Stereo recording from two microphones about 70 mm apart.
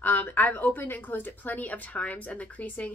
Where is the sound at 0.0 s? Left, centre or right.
Left.